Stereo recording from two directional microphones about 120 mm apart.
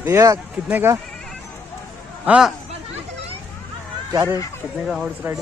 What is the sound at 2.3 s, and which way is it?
Speech, 5° right (ahead or behind).